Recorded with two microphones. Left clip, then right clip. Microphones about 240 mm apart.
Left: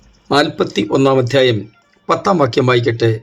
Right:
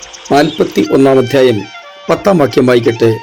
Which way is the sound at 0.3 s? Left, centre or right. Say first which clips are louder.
Right 4 dB; centre.